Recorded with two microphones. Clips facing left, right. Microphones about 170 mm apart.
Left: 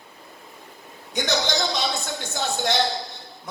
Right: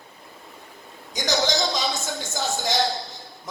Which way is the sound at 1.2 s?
60° left (ahead or behind).